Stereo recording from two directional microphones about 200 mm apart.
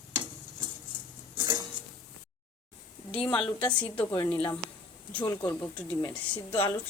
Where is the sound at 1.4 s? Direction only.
20° right (ahead or behind).